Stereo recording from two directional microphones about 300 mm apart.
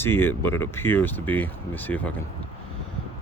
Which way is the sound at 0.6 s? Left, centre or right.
Centre.